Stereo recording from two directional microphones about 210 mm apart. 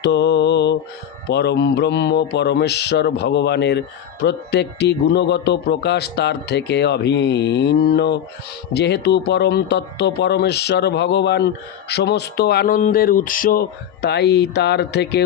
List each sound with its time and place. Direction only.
0.0 s mantra: 55° left (ahead or behind)
1.3 s speech: 55° left (ahead or behind)